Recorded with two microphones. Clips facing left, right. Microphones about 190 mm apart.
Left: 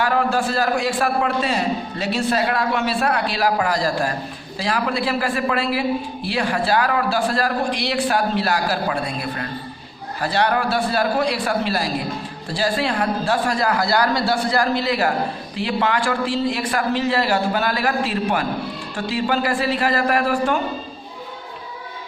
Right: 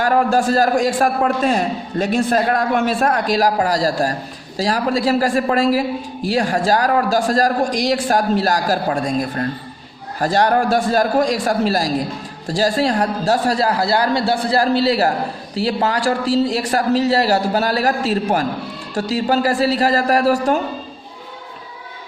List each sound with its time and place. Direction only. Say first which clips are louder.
0.0 s a man's voice: right 4 dB; 45° right (ahead or behind)